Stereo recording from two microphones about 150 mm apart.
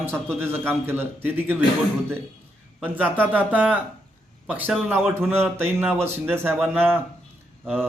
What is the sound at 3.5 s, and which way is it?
A man's voice, 10° right (ahead or behind).